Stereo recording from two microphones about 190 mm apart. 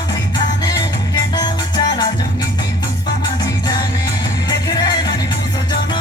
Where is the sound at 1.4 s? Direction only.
20° left (ahead or behind).